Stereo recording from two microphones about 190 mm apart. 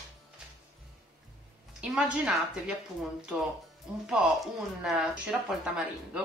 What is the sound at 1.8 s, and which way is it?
Speech, 5° right (ahead or behind).